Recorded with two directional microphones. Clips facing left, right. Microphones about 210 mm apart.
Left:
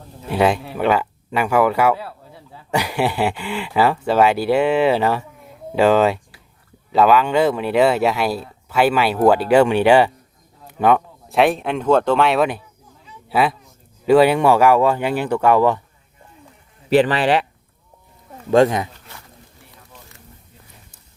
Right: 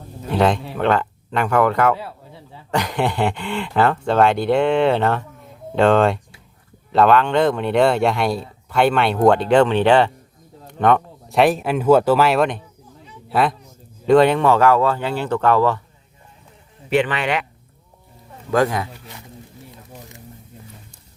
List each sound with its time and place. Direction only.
0.3 s speech: 5° left (ahead or behind)
16.9 s speech: 35° left (ahead or behind)
18.5 s speech: 25° left (ahead or behind)
18.9 s a sound: 15° right (ahead or behind)